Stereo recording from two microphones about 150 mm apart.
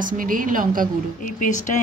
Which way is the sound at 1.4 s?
55° left (ahead or behind).